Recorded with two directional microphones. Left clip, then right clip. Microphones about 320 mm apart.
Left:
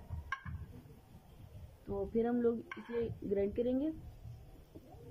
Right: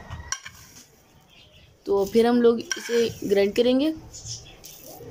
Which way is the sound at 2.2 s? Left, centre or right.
Centre.